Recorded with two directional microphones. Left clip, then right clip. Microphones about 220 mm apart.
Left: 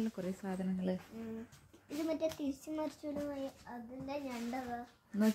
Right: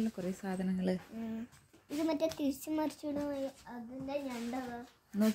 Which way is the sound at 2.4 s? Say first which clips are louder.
Right 4 dB; 45° right (ahead or behind).